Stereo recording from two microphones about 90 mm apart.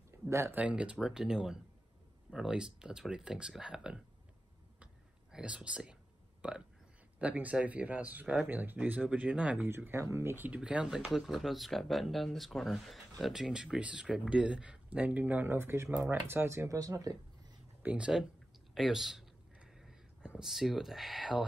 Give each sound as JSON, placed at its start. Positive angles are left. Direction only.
{"t": 0.3, "sound": "speech", "side_deg": -30}
{"t": 0.6, "sound": "speech", "side_deg": -15}
{"t": 5.3, "sound": "speech", "side_deg": -10}
{"t": 9.7, "sound": "speech", "side_deg": -25}
{"t": 10.6, "sound": "speech", "side_deg": -10}
{"t": 17.8, "sound": "speech", "side_deg": -10}
{"t": 18.8, "sound": "a sound", "side_deg": -5}